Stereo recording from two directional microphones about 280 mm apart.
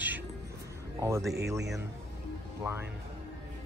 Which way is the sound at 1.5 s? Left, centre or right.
Centre.